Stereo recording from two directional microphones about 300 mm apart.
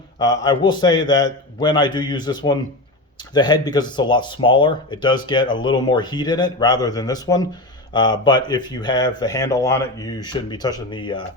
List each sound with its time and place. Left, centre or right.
0.2 s speech: centre